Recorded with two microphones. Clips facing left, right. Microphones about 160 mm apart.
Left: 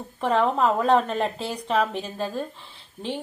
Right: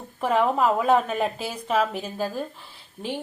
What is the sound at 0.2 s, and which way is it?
A woman's voice, 5° right (ahead or behind).